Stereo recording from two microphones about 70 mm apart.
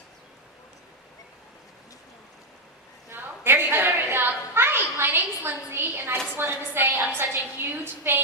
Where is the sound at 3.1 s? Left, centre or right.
Right.